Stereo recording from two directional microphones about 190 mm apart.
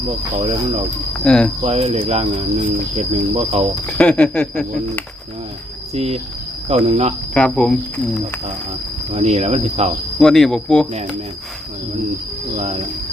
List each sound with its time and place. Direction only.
0.3 s speech: 30° right (ahead or behind)
1.2 s speech: 5° left (ahead or behind)
1.6 s speech: 35° right (ahead or behind)
3.9 s a sound: 5° left (ahead or behind)
5.9 s speech: 35° right (ahead or behind)
7.3 s a sound: 5° left (ahead or behind)
9.1 s speech: 35° right (ahead or behind)
10.2 s speech: 5° left (ahead or behind)
12.5 s speech: 35° right (ahead or behind)